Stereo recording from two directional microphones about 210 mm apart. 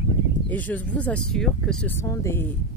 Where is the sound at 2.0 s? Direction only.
10° left (ahead or behind).